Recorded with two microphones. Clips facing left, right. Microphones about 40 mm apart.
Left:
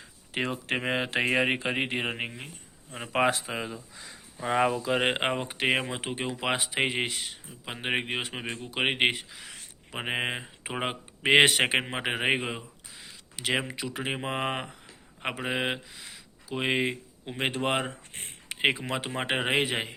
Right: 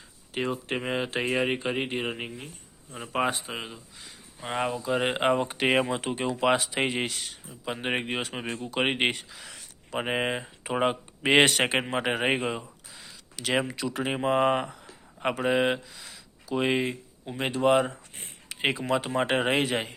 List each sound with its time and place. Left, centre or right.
0.3 s speech: left
2.9 s speech: left
4.9 s speech: left
5.2 s speech: centre
5.5 s speech: centre
6.0 s a man's voice: centre
13.1 s a sound: left
13.7 s speech: centre
16.8 s speech: left
18.4 s a man's voice: left